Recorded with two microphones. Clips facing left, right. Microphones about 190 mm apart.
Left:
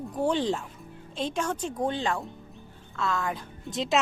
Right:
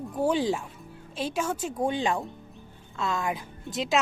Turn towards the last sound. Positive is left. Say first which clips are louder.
# even
turn(degrees=0)  # may be behind; listen again after turning